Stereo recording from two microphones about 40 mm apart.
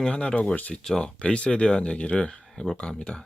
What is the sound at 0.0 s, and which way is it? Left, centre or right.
Speech, left.